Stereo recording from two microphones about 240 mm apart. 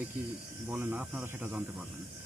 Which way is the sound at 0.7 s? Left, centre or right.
Centre.